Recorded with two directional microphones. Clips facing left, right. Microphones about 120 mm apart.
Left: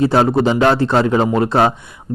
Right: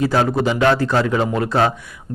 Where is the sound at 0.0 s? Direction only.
30° left (ahead or behind).